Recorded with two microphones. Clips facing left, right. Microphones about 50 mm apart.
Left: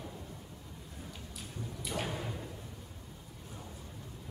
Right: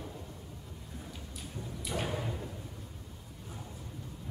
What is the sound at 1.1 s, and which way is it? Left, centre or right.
Music, centre.